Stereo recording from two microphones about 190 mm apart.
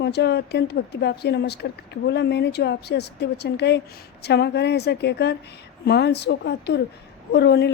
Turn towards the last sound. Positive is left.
turn(degrees=60)  # may be behind; listen again after turning